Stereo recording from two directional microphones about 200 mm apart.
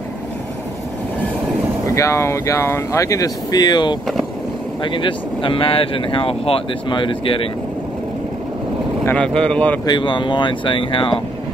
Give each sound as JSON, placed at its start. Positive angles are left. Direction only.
{"t": 1.9, "sound": "speech", "side_deg": 15}
{"t": 9.0, "sound": "speech", "side_deg": 5}
{"t": 9.8, "sound": "speech", "side_deg": 25}